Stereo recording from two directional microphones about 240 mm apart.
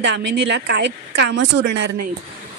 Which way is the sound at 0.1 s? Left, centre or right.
Right.